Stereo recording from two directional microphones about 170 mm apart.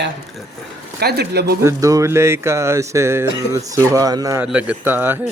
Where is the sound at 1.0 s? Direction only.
70° right (ahead or behind).